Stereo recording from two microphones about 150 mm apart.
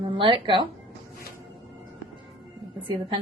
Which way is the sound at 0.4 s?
35° right (ahead or behind).